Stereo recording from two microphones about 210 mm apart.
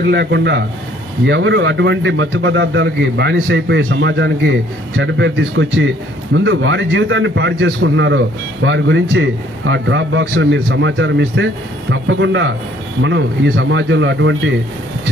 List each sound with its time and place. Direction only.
0.0 s a man's voice: 50° right (ahead or behind)